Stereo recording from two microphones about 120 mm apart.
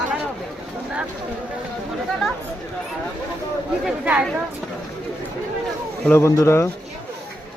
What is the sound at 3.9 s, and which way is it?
Speech, 10° right (ahead or behind).